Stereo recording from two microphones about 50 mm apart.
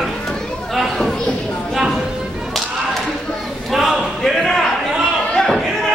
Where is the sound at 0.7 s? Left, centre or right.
Centre.